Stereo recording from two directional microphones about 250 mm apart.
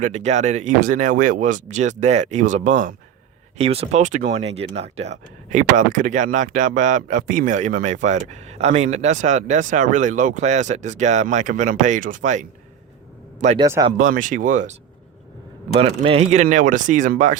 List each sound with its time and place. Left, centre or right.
0.0 s speech: right
13.7 s speech: centre
14.0 s speech: right